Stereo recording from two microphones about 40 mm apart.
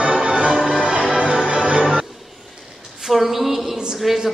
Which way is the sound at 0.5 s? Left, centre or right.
Centre.